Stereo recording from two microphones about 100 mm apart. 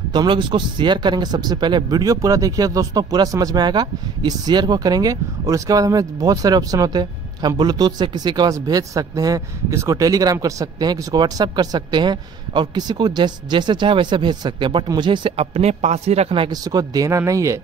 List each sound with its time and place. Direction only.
0.1 s speech: 50° right (ahead or behind)
15.3 s speech: 90° right
16.4 s speech: 40° right (ahead or behind)